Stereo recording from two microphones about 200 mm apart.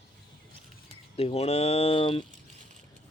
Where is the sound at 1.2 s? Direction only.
30° left (ahead or behind).